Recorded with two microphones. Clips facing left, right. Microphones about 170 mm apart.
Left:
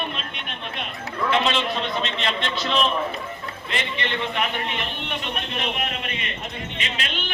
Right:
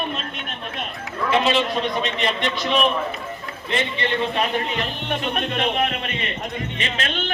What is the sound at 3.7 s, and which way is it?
Speech, 25° right (ahead or behind).